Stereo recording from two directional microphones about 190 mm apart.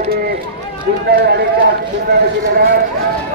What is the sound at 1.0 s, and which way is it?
Speech, 60° right (ahead or behind).